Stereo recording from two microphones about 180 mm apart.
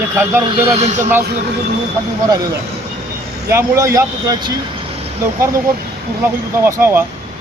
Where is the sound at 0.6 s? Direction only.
35° right (ahead or behind).